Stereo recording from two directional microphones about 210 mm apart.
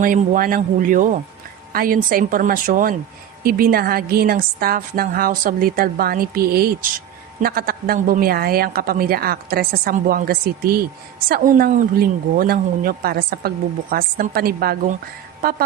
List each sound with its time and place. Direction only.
0.0 s a man's voice: 40° right (ahead or behind)